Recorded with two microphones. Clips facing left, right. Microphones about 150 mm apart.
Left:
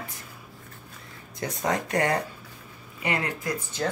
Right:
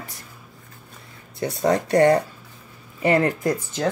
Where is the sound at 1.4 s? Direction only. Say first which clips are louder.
Right 7 dB; 35° right (ahead or behind).